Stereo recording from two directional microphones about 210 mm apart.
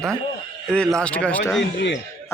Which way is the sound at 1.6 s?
55° left (ahead or behind).